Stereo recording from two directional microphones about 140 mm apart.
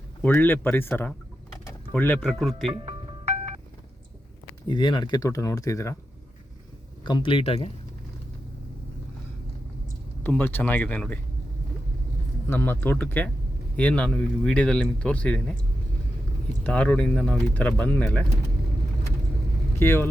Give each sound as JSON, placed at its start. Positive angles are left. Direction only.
{"t": 0.2, "sound": "a man's voice", "side_deg": 15}
{"t": 2.2, "sound": "speech", "side_deg": 0}
{"t": 4.7, "sound": "speech", "side_deg": 35}
{"t": 7.0, "sound": "speech", "side_deg": 35}
{"t": 10.2, "sound": "a man's voice", "side_deg": 15}
{"t": 12.5, "sound": "a man's voice", "side_deg": 15}
{"t": 16.6, "sound": "a man's voice", "side_deg": 10}
{"t": 19.8, "sound": "a man's voice", "side_deg": 15}